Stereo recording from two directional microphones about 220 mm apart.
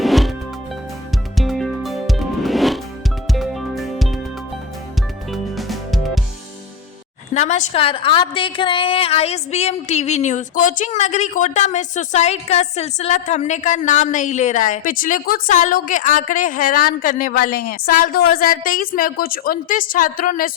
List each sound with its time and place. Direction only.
0.0 s music: centre (ahead or behind)
1.4 s music: centre (ahead or behind)
5.3 s music: centre (ahead or behind)
7.3 s a woman's voice: 35° left (ahead or behind)